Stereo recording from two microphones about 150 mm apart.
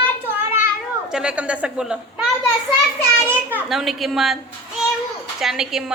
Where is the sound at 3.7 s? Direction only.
Centre (ahead or behind).